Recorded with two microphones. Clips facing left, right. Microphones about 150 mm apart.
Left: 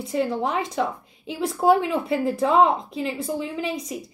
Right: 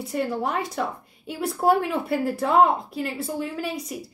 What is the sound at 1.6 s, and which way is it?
A woman's voice, centre (ahead or behind).